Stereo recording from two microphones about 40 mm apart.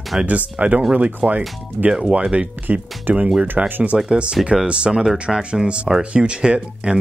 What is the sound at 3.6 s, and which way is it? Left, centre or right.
Speech, right.